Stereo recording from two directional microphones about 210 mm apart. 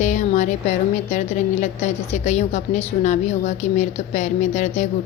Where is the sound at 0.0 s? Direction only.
35° left (ahead or behind).